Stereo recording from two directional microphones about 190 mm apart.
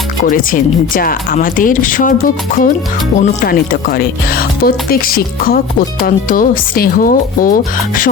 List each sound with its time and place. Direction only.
0.3 s speech: 45° left (ahead or behind)